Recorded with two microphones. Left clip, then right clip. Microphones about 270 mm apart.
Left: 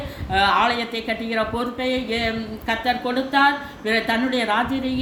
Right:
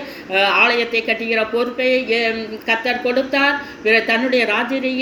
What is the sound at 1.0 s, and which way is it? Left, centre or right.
Speech, left.